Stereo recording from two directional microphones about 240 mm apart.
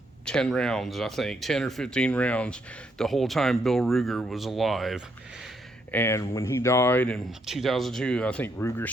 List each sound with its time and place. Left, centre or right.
0.3 s speech: centre
5.9 s speech: centre